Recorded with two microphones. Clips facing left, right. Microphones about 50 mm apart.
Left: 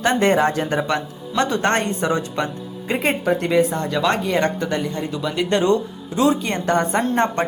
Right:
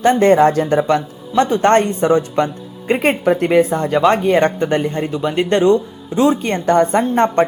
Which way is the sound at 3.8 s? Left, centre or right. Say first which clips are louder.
Right 6 dB; right.